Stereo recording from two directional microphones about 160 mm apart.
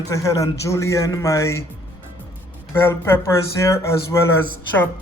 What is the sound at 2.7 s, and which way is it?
Speech, 15° left (ahead or behind).